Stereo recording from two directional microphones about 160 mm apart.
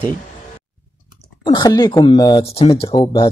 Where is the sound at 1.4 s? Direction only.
30° left (ahead or behind).